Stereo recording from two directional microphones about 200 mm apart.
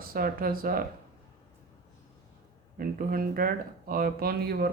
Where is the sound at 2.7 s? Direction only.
45° right (ahead or behind).